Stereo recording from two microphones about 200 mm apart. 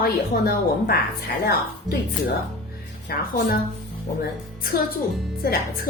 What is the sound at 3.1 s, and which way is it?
Speech, 50° left (ahead or behind).